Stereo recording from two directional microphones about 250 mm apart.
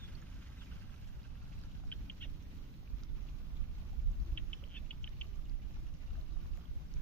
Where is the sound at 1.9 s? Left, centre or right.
Centre.